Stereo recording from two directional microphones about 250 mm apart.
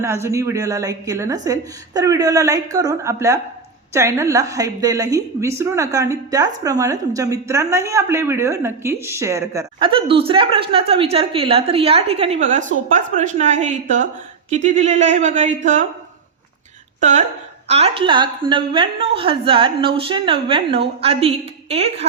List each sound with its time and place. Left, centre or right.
0.0 s a woman's voice: centre; by 15.9 s right
17.0 s a woman's voice: right